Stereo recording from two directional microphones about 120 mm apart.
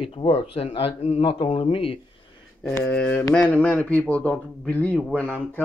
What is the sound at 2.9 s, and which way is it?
Speech, 10° left (ahead or behind).